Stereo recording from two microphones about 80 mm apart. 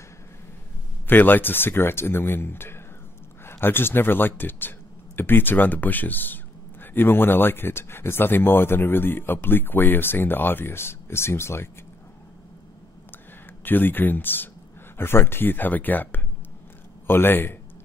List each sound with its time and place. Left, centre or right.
1.0 s speech: left
13.7 s speech: left